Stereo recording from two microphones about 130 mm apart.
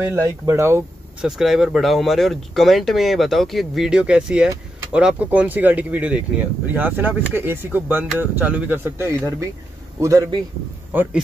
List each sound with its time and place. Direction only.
0.0 s speech: 20° right (ahead or behind)
1.2 s a man's voice: 5° right (ahead or behind); by 10.2 s 25° right (ahead or behind)
10.9 s speech: 15° right (ahead or behind)